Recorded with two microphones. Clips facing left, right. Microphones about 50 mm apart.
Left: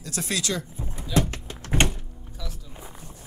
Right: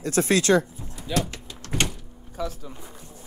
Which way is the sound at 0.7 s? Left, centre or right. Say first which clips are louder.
Left 3 dB; left.